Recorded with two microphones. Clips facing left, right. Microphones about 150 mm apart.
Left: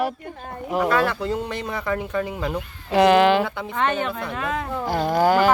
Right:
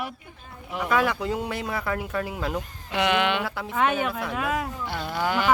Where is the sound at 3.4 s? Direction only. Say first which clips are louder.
Left 1 dB; 5° right (ahead or behind).